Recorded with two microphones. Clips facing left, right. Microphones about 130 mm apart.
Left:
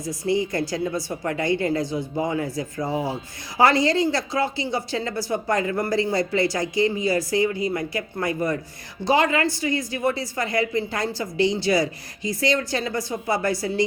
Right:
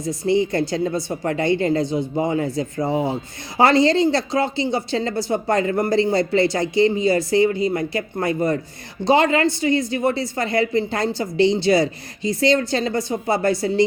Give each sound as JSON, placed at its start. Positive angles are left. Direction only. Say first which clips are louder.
{"t": 0.0, "sound": "a woman's voice", "louder": "right 4 dB", "side_deg": -25}